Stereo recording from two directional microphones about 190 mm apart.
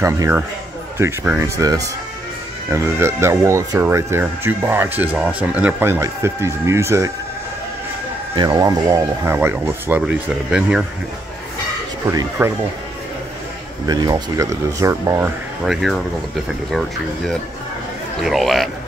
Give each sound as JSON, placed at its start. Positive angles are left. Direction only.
{"t": 0.0, "sound": "speech", "side_deg": -15}
{"t": 8.4, "sound": "speech", "side_deg": -20}
{"t": 12.1, "sound": "speech", "side_deg": -15}
{"t": 13.8, "sound": "speech", "side_deg": -20}
{"t": 15.6, "sound": "a man's voice", "side_deg": 0}
{"t": 18.2, "sound": "a man's voice", "side_deg": 0}